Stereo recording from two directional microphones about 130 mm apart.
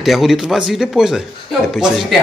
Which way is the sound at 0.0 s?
Centre (ahead or behind).